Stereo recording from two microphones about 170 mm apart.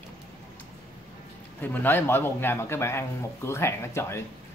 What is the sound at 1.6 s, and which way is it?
A man's voice, 10° left (ahead or behind).